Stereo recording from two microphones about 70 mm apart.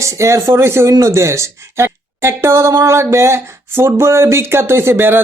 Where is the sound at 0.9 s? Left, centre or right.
Right.